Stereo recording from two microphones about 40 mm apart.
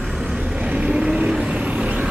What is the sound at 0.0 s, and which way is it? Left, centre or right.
Vehicle, centre.